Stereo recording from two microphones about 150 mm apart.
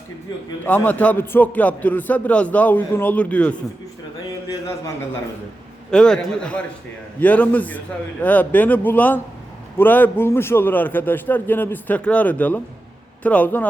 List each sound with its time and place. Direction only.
0.6 s a man's voice: 15° left (ahead or behind)
5.9 s a man's voice: 5° left (ahead or behind)